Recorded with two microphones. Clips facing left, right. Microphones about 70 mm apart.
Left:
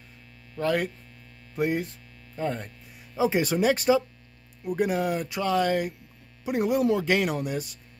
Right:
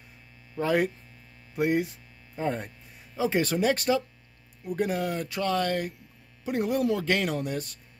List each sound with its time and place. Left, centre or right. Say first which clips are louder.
0.6 s speech: right 1 dB; centre
3.2 s speech: left 2 dB; centre